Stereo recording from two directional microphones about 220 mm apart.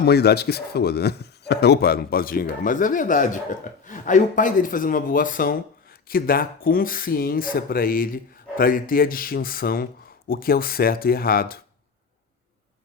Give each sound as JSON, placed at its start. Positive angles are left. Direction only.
{"t": 0.0, "sound": "speech", "side_deg": 45}